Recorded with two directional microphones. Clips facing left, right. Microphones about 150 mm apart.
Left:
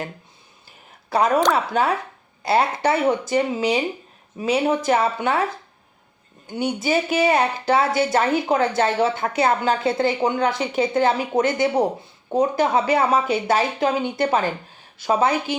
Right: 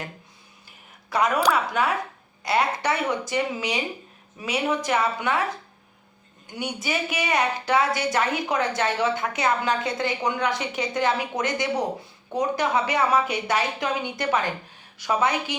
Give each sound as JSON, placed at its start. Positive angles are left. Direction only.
{"t": 1.1, "sound": "a woman's voice", "side_deg": 30}
{"t": 6.5, "sound": "a woman's voice", "side_deg": 30}